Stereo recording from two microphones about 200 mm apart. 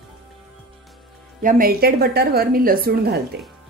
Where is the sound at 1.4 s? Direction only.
45° right (ahead or behind).